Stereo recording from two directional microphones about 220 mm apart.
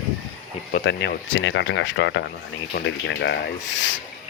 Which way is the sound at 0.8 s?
55° left (ahead or behind).